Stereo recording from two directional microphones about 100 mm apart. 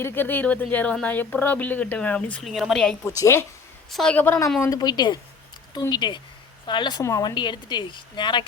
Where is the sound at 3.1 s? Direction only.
30° left (ahead or behind).